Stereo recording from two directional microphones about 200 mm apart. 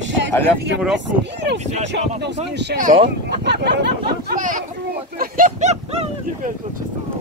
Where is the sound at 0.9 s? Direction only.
60° right (ahead or behind).